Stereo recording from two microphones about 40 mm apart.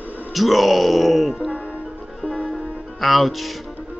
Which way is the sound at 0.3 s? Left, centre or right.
Centre.